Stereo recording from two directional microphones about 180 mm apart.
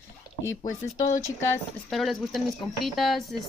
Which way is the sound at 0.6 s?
45° left (ahead or behind).